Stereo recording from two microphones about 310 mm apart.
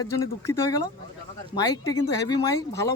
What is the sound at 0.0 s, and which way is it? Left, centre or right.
Speech, centre.